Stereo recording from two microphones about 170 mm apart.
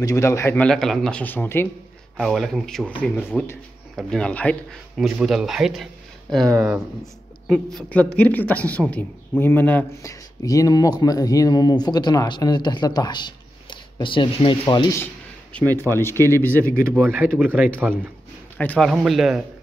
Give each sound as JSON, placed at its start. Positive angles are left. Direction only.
{"t": 0.0, "sound": "a man's voice", "side_deg": 15}
{"t": 2.1, "sound": "a man's voice", "side_deg": 0}
{"t": 15.5, "sound": "a man's voice", "side_deg": 10}
{"t": 16.8, "sound": "speech", "side_deg": -15}
{"t": 18.6, "sound": "speech", "side_deg": 5}